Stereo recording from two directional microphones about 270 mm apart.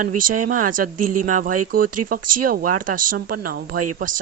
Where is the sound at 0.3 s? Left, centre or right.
Right.